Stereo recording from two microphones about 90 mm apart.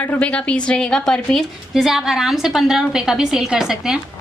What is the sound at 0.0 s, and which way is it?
A woman's voice, 15° left (ahead or behind).